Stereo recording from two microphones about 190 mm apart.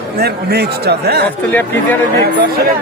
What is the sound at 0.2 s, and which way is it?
Speech, 60° right (ahead or behind).